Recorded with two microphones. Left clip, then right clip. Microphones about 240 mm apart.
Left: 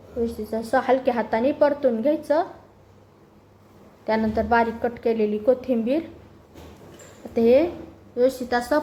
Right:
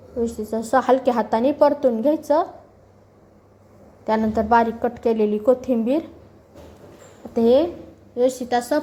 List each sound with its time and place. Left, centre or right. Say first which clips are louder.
0.2 s a woman's voice: right 2 dB; centre
4.0 s a woman's voice: right 2 dB; centre
7.3 s a woman's voice: right 1 dB; centre